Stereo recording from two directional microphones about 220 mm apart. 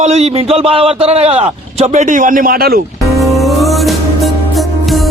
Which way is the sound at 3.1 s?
Centre (ahead or behind).